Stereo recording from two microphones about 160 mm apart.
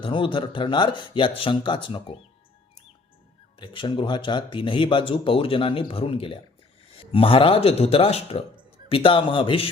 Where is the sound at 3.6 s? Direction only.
30° left (ahead or behind).